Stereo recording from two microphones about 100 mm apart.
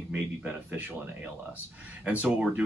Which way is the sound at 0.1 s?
15° right (ahead or behind).